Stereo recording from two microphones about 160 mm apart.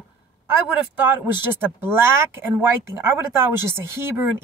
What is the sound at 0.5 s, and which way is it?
Speech, 10° right (ahead or behind).